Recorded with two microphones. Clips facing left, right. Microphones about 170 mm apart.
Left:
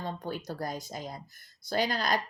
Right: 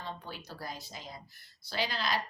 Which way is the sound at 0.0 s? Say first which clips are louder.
Left 7 dB; 50° left (ahead or behind).